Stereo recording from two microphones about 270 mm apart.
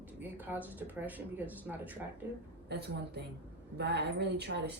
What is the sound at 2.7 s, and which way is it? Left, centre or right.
Speech, right.